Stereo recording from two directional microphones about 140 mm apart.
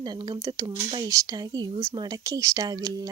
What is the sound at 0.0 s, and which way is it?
Speech, 30° right (ahead or behind).